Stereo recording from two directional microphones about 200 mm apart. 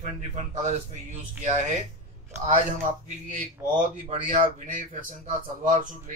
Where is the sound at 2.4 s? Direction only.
40° right (ahead or behind).